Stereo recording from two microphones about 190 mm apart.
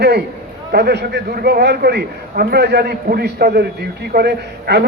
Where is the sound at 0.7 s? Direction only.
60° right (ahead or behind).